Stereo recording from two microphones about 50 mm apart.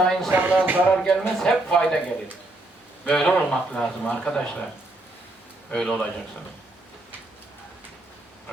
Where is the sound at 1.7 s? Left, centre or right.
Centre.